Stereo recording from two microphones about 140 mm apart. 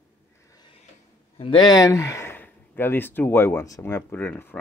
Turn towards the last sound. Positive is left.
turn(degrees=15)  # may be behind; listen again after turning